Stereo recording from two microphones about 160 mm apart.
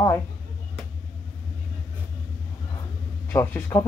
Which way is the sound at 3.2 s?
15° left (ahead or behind).